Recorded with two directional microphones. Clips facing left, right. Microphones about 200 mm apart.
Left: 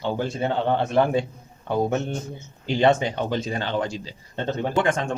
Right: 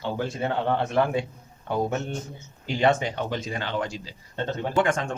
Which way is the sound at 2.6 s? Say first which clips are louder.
Left 3 dB; 30° left (ahead or behind).